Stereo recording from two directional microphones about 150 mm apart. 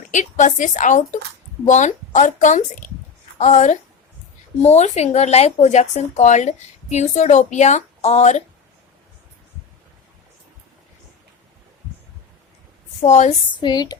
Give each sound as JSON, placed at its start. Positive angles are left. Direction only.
{"t": 0.1, "sound": "a woman's voice", "side_deg": 55}
{"t": 13.0, "sound": "speech", "side_deg": 50}
{"t": 13.5, "sound": "a woman's voice", "side_deg": 30}